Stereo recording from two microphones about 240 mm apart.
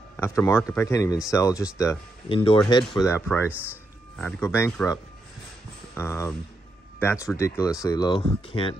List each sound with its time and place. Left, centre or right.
0.2 s speech: centre
3.0 s speech: centre
3.4 s speech: centre
4.2 s speech: centre